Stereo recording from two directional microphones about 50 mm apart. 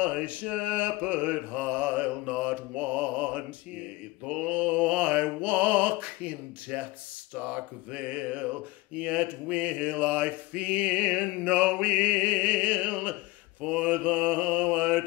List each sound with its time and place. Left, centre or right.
0.0 s mantra: right